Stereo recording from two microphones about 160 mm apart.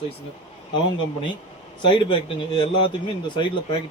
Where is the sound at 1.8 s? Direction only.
30° left (ahead or behind).